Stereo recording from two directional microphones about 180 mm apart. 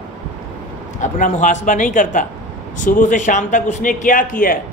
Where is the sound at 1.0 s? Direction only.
45° left (ahead or behind).